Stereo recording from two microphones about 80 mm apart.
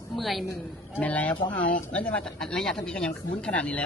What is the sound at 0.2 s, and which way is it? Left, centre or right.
Speech, centre.